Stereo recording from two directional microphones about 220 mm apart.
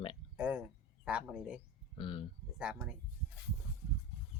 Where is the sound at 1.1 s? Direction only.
5° right (ahead or behind).